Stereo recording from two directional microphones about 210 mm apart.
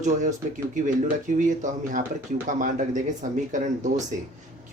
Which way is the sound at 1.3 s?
35° right (ahead or behind).